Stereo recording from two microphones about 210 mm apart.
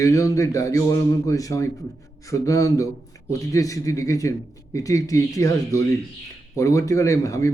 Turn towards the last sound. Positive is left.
turn(degrees=15)  # may be behind; listen again after turning